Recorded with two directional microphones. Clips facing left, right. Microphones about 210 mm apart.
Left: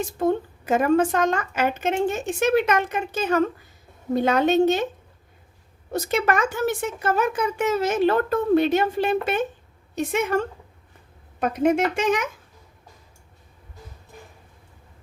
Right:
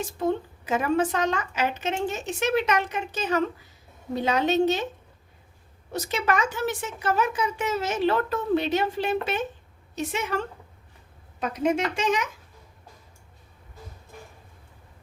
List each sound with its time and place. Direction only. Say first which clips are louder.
0.2 s speech: left 4 dB; 50° left (ahead or behind)
5.9 s speech: left 4 dB; 50° left (ahead or behind)